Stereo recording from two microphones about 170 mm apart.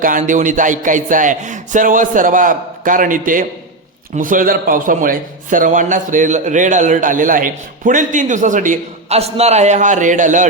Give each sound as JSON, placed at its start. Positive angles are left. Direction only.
{"t": 0.0, "sound": "a man's voice", "side_deg": -50}